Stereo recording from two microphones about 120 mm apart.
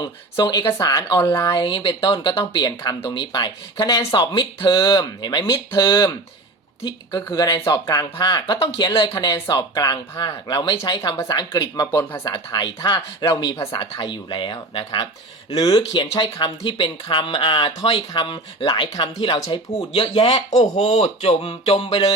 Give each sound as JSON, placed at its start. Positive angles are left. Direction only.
{"t": 0.0, "sound": "speech", "side_deg": 35}
{"t": 1.3, "sound": "speech", "side_deg": 20}
{"t": 1.5, "sound": "speech", "side_deg": 40}
{"t": 13.3, "sound": "speech", "side_deg": 25}
{"t": 13.7, "sound": "speech", "side_deg": 45}
{"t": 20.6, "sound": "speech", "side_deg": 65}